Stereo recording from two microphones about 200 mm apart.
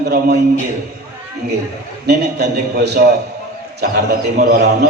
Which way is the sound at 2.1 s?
55° right (ahead or behind).